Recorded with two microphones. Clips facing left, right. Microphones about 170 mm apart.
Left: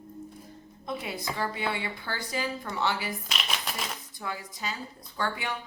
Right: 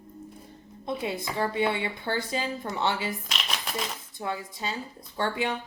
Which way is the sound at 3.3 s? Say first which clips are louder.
Right 1 dB; centre (ahead or behind).